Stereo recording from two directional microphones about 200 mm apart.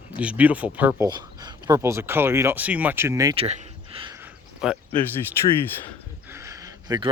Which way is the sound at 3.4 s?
30° right (ahead or behind).